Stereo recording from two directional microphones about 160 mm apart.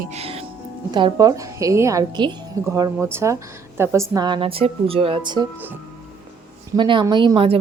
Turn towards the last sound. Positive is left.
turn(degrees=-35)  # may be behind; listen again after turning